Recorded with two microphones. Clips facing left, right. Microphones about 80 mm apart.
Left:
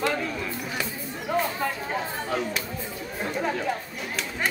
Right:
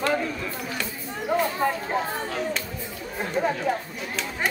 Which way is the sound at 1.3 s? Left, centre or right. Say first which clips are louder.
Right 2 dB; centre.